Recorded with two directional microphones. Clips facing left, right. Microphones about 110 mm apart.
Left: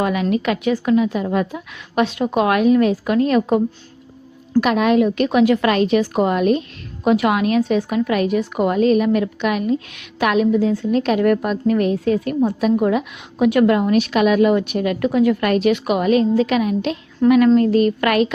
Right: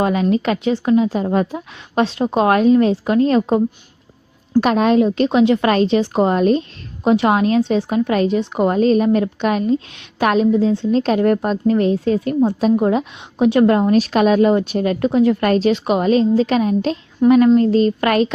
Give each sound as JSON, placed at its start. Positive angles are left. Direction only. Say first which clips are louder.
{"t": 0.0, "sound": "a woman's voice", "louder": "right 2 dB", "side_deg": -30}
{"t": 4.6, "sound": "a woman's voice", "louder": "right 1 dB", "side_deg": -35}